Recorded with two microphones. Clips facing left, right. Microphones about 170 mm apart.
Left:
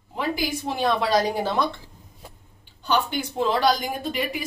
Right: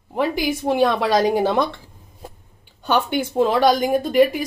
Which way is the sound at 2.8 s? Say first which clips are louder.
Right 4 dB; 50° right (ahead or behind).